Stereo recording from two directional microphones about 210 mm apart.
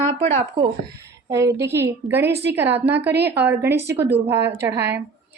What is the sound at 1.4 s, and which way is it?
Speech, 55° right (ahead or behind).